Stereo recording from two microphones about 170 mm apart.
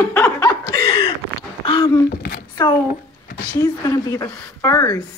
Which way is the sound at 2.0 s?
60° left (ahead or behind).